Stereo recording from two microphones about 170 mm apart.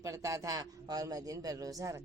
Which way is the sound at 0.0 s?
20° right (ahead or behind).